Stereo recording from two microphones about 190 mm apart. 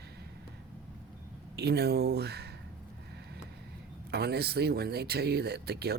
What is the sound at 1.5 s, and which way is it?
Speech, 60° right (ahead or behind).